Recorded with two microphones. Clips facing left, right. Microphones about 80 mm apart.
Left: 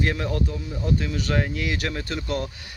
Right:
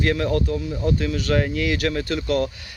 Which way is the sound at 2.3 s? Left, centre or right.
Right.